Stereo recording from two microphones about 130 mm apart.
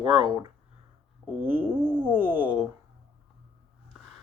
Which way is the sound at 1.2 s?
15° right (ahead or behind).